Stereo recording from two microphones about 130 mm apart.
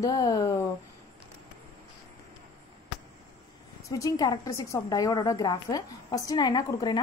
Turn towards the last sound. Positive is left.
turn(degrees=35)  # may be behind; listen again after turning